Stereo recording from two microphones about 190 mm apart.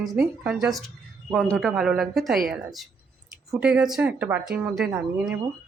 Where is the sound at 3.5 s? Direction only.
5° right (ahead or behind).